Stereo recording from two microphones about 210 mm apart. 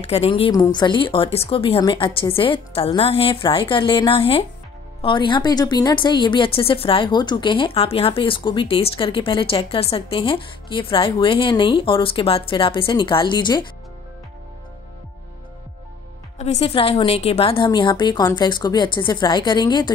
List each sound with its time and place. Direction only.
0.0 s speech: 30° left (ahead or behind)
16.3 s speech: 30° left (ahead or behind)